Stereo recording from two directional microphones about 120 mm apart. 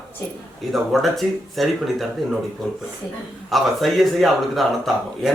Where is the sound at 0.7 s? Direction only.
Centre (ahead or behind).